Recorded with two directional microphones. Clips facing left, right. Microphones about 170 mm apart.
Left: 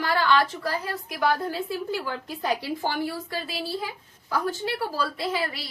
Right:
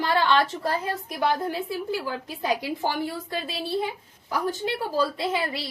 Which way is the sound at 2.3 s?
15° right (ahead or behind).